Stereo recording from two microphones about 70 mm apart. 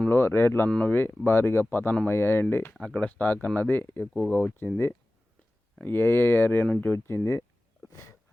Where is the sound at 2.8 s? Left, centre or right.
Centre.